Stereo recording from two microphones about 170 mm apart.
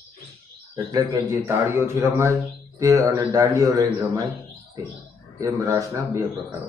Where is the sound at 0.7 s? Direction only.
20° right (ahead or behind).